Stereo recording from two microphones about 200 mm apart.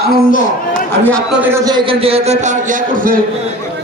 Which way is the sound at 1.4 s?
10° right (ahead or behind).